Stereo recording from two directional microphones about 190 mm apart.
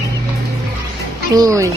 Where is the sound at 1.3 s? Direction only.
15° right (ahead or behind).